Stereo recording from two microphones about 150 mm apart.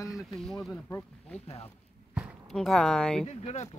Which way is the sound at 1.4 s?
40° left (ahead or behind).